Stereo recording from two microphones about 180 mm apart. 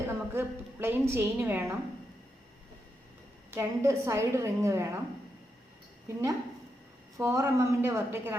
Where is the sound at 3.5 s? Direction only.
15° right (ahead or behind).